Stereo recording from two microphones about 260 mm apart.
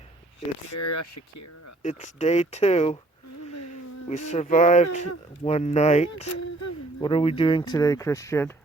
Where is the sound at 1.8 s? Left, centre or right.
Left.